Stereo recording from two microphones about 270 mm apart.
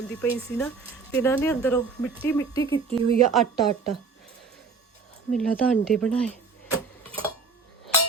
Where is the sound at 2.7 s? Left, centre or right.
Centre.